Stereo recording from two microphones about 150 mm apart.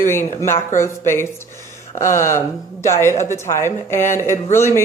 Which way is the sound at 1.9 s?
55° left (ahead or behind).